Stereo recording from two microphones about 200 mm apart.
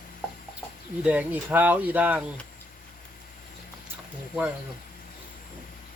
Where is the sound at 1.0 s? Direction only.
5° right (ahead or behind).